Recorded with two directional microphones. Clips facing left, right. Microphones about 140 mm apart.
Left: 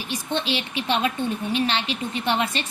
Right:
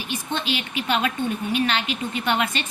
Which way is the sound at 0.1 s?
35° left (ahead or behind).